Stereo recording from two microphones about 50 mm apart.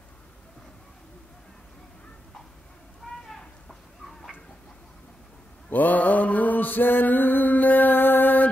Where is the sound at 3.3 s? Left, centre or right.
Centre.